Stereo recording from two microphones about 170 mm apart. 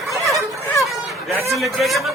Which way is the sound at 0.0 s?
20° right (ahead or behind).